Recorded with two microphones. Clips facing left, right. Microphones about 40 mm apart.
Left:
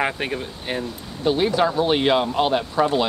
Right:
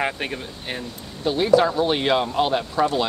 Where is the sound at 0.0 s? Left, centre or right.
Centre.